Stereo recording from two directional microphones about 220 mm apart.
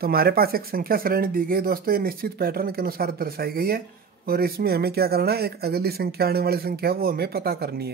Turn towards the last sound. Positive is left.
turn(degrees=-45)  # may be behind; listen again after turning